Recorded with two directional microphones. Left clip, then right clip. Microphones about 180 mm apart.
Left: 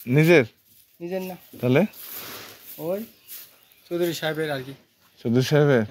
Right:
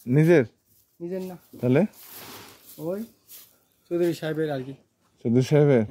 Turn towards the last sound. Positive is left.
turn(degrees=-25)  # may be behind; listen again after turning